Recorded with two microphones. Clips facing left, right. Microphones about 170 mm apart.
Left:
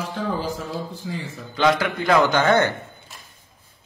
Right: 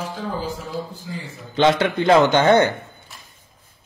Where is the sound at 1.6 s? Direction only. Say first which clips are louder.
Right 3 dB; 25° right (ahead or behind).